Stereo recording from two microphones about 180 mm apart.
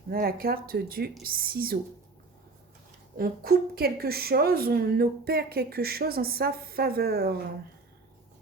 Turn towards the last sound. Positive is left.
turn(degrees=-60)  # may be behind; listen again after turning